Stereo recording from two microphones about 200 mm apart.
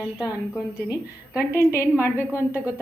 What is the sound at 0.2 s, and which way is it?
A woman's voice, 15° left (ahead or behind).